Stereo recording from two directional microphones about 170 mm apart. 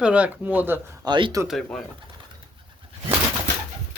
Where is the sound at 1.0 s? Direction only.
25° right (ahead or behind).